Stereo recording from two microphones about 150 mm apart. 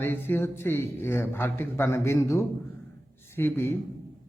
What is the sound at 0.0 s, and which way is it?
Speech, 15° left (ahead or behind).